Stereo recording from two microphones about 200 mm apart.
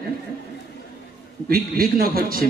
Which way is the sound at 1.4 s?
45° right (ahead or behind).